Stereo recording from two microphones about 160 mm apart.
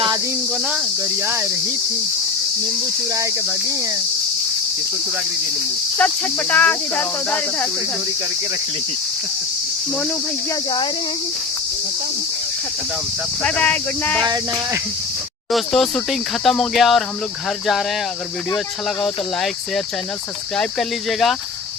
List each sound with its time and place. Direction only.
0.5 s cricket: centre (ahead or behind)
1.2 s speech: 15° right (ahead or behind)
3.1 s cricket: 20° right (ahead or behind)
6.0 s speech: 10° left (ahead or behind)
13.4 s speech: 10° left (ahead or behind)
15.5 s speech: centre (ahead or behind)
19.0 s speech: centre (ahead or behind)